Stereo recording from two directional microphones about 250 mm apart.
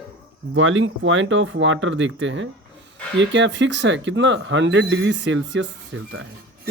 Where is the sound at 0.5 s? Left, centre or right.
Right.